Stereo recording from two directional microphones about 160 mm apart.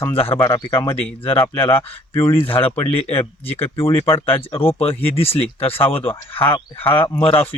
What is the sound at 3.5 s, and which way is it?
Speech, 35° left (ahead or behind).